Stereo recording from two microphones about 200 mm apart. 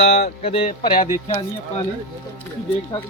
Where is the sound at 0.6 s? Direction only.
45° left (ahead or behind).